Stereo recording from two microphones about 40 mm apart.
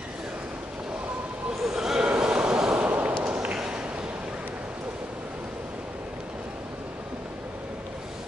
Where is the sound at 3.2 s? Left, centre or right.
Right.